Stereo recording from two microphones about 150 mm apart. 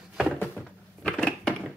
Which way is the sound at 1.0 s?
5° left (ahead or behind).